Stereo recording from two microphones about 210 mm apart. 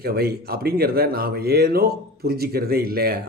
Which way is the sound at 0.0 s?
50° right (ahead or behind).